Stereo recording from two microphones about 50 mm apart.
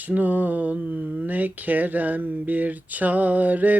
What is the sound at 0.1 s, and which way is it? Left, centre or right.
Mantra, right.